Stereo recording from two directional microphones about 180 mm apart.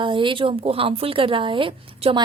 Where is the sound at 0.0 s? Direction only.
25° right (ahead or behind).